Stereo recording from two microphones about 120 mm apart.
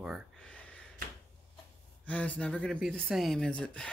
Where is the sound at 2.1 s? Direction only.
10° left (ahead or behind).